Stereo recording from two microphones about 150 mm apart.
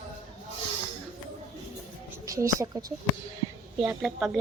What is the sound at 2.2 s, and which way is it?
Speech, 20° right (ahead or behind).